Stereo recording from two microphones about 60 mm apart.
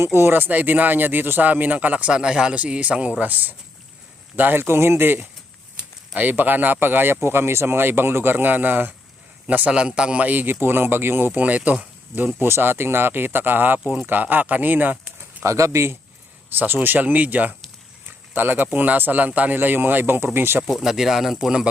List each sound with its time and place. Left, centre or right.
0.0 s speech: right
11.3 s speech: right
12.4 s speech: right
15.4 s speech: right
16.6 s speech: right
20.8 s a man's voice: centre